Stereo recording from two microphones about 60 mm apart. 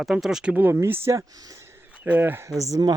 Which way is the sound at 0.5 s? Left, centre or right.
Right.